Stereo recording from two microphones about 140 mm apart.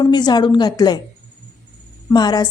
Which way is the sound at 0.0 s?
30° left (ahead or behind).